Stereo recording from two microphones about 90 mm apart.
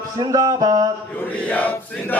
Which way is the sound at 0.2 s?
45° right (ahead or behind).